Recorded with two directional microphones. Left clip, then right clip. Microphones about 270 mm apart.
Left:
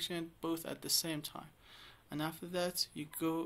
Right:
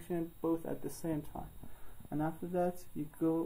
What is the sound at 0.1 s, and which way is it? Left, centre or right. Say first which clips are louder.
Speech: right 4 dB; left.